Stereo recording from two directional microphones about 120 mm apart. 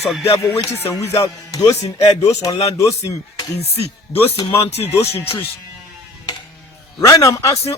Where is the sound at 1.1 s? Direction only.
30° left (ahead or behind).